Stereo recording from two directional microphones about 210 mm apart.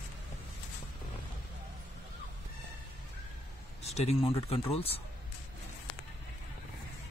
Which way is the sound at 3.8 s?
30° left (ahead or behind).